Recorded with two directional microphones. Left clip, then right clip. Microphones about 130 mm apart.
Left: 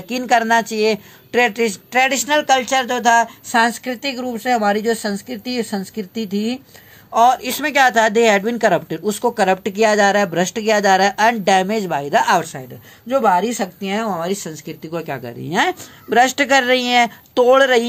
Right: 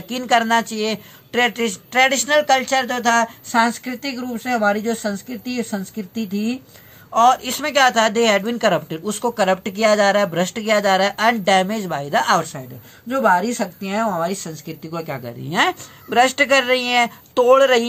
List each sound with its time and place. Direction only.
0.1 s a woman's voice: 45° left (ahead or behind)
13.1 s a woman's voice: 65° left (ahead or behind); by 17.8 s 40° left (ahead or behind)